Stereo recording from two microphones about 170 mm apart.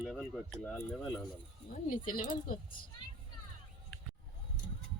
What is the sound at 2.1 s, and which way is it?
Speech, 55° left (ahead or behind).